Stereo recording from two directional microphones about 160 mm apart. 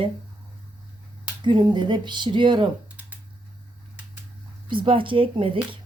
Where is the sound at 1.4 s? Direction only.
30° right (ahead or behind).